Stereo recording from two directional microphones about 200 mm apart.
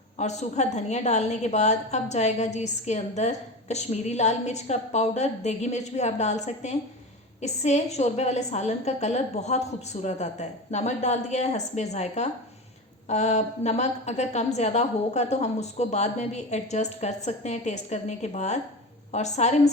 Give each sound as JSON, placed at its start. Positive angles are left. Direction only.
{"t": 0.2, "sound": "a woman's voice", "side_deg": 35}